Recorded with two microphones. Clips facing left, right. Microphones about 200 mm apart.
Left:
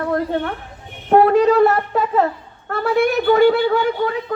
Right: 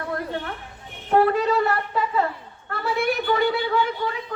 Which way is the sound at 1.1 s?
55° left (ahead or behind).